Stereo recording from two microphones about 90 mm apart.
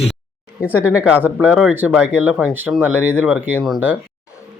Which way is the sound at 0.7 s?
15° right (ahead or behind).